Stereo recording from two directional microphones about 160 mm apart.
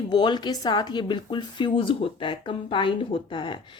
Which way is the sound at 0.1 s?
25° left (ahead or behind).